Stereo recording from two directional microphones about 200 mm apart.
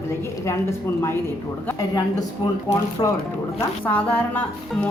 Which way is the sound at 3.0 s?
20° left (ahead or behind).